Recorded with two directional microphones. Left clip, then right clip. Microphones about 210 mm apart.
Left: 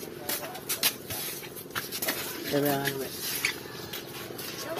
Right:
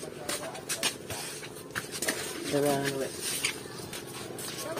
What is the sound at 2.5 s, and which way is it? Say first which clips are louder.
Speech: even; 45° left (ahead or behind).